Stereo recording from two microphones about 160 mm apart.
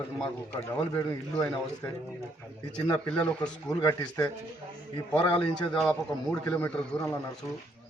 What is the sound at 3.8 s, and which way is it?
Speech, 20° left (ahead or behind).